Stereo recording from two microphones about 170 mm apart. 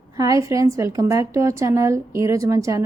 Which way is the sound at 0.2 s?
20° right (ahead or behind).